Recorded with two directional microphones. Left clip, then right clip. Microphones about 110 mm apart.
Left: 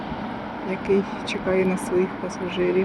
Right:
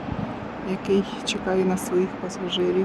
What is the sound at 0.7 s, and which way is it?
Speech, 20° right (ahead or behind).